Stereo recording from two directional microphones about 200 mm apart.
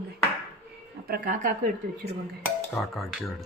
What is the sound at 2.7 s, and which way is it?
Speech, centre (ahead or behind).